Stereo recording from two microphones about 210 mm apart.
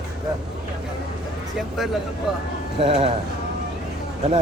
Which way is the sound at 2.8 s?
30° right (ahead or behind).